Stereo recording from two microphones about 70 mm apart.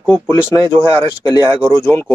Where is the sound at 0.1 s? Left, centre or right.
Left.